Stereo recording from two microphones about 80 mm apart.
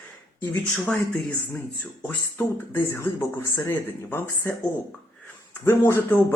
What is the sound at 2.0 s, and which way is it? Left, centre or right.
Speech, left.